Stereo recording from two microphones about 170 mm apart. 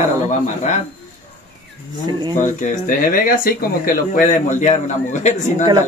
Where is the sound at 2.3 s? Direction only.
50° left (ahead or behind).